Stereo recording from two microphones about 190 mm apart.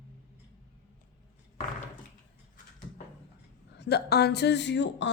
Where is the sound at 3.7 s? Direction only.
60° left (ahead or behind).